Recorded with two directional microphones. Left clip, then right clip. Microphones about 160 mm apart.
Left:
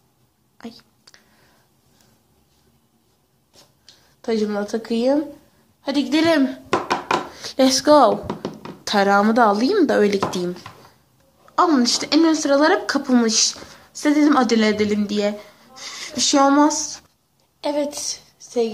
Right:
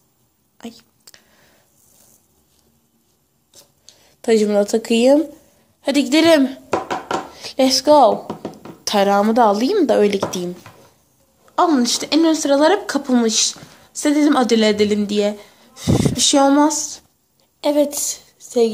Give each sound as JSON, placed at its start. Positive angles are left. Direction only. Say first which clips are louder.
{"t": 0.6, "sound": "whispering", "louder": "right 2 dB", "side_deg": -25}
{"t": 4.2, "sound": "a woman's voice", "louder": "right 7 dB", "side_deg": -55}
{"t": 7.3, "sound": "speech", "louder": "right 3 dB", "side_deg": 0}
{"t": 8.8, "sound": "speech", "louder": "right 1 dB", "side_deg": -10}
{"t": 11.4, "sound": "speech", "louder": "right 1 dB", "side_deg": -25}
{"t": 17.6, "sound": "a woman's voice", "louder": "right 6 dB", "side_deg": -45}